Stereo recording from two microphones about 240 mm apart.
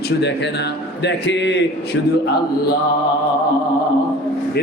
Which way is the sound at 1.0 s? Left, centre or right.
Left.